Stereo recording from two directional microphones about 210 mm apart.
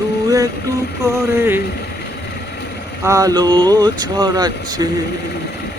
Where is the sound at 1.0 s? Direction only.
15° right (ahead or behind).